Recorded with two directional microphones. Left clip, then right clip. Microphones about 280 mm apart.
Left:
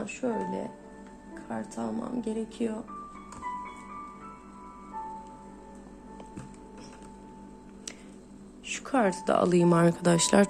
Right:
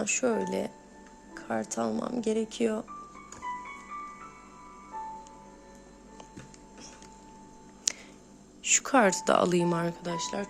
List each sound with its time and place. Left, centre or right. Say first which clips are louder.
0.0 s speech: right 4 dB; right
7.9 s finger snapping: right 12 dB; centre
8.6 s speech: right 4 dB; centre
9.7 s speech: left 8 dB; centre